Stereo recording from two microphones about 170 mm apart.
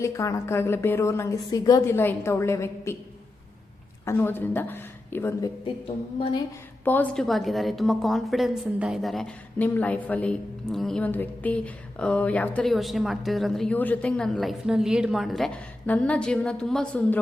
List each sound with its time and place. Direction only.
0.0 s a woman's voice: 20° left (ahead or behind)
4.0 s a woman's voice: 15° left (ahead or behind)
6.8 s a woman's voice: 10° left (ahead or behind)